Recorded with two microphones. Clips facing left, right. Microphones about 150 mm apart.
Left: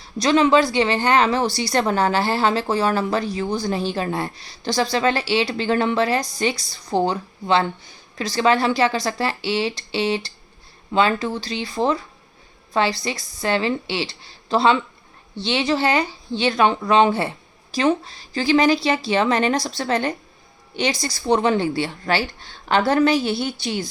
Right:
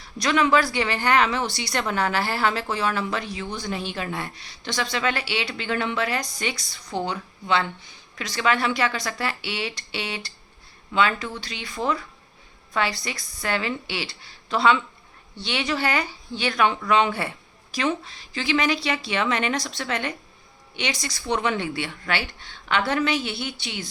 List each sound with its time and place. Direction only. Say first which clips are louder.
0.0 s speech: left 5 dB; 30° left (ahead or behind)